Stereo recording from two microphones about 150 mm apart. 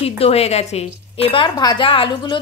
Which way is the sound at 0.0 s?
40° left (ahead or behind).